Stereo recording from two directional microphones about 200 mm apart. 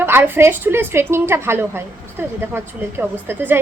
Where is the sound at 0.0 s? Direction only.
10° right (ahead or behind).